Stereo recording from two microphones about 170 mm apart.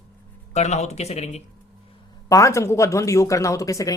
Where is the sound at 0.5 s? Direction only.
40° left (ahead or behind).